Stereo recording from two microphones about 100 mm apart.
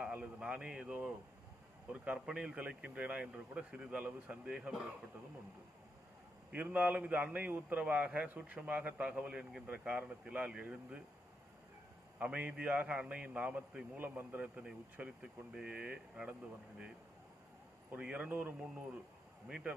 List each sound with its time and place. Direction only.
0.0 s a man's voice: 10° right (ahead or behind)
6.5 s a man's voice: 15° right (ahead or behind)
12.2 s a man's voice: 10° right (ahead or behind)
17.9 s a man's voice: 10° right (ahead or behind)